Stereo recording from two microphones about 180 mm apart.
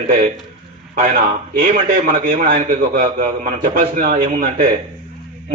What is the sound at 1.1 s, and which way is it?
A man's voice, 50° right (ahead or behind).